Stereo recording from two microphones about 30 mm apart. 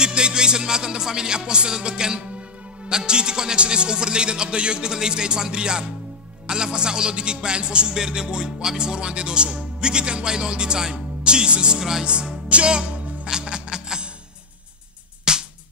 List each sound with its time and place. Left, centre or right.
0.0 s music: right
3.5 s speech: right
4.9 s music: right
6.4 s speech: right
7.9 s music: right
8.6 s speech: right
9.6 s music: right
10.8 s speech: right
13.3 s music: right
15.3 s music: right